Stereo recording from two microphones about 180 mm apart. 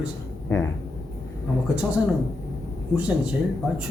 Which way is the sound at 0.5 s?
15° left (ahead or behind).